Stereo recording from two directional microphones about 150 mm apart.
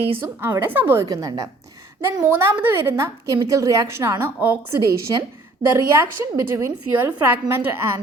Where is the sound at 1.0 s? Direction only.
25° right (ahead or behind).